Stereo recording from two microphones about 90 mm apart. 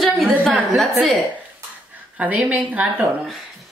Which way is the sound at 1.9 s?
15° right (ahead or behind).